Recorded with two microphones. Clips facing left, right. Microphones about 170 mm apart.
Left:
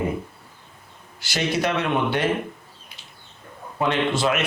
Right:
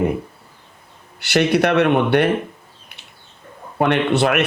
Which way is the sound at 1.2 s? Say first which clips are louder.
Right 8 dB; 65° right (ahead or behind).